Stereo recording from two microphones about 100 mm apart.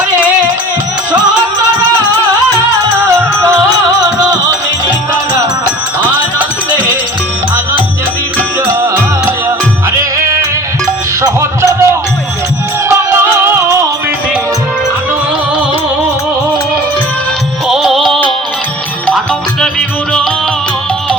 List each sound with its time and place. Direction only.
8.6 s music: 25° right (ahead or behind)
11.2 s music: 30° right (ahead or behind)
17.7 s music: centre (ahead or behind)